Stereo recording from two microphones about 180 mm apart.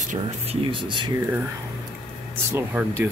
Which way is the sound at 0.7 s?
25° right (ahead or behind).